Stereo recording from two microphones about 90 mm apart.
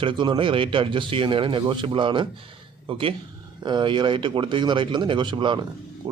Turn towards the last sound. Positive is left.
turn(degrees=-65)  # may be behind; listen again after turning